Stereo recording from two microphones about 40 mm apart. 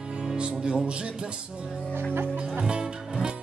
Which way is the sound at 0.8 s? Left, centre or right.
Right.